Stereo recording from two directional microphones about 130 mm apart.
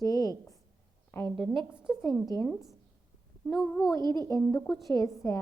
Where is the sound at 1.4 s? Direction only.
5° right (ahead or behind).